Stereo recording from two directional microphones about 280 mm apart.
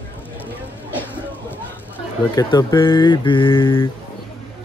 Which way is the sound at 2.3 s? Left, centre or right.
Centre.